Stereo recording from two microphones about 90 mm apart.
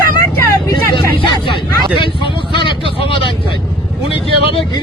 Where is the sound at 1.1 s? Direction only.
70° left (ahead or behind).